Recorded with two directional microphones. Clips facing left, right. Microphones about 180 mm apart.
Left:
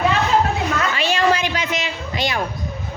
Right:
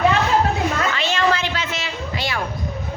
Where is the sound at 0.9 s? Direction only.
15° left (ahead or behind).